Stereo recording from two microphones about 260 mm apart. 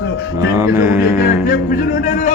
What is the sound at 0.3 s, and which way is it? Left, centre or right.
Music, centre.